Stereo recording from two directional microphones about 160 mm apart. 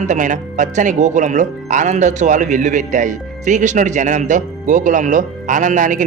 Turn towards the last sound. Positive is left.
turn(degrees=-55)  # may be behind; listen again after turning